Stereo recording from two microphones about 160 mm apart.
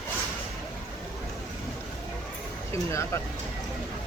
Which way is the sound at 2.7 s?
20° left (ahead or behind).